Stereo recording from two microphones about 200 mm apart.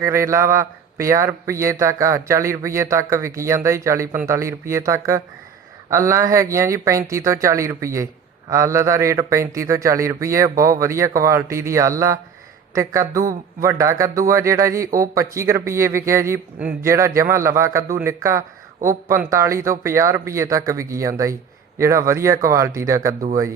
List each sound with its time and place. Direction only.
0.0 s speech: 15° right (ahead or behind)